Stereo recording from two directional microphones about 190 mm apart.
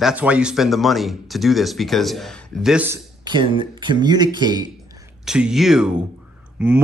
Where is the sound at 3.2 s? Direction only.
25° right (ahead or behind).